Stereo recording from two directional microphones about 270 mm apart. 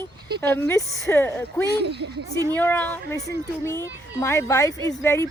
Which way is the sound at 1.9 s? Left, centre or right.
Right.